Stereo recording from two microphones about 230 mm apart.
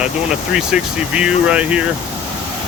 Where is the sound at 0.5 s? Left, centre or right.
Centre.